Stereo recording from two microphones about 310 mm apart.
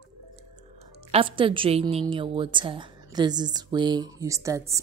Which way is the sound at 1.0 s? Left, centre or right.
Centre.